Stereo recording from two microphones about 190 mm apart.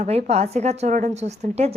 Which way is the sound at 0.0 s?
35° right (ahead or behind).